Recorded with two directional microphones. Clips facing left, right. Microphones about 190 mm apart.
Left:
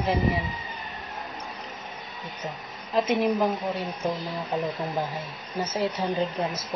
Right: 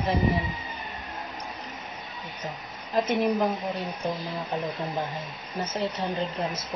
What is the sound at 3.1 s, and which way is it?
Speech, centre (ahead or behind).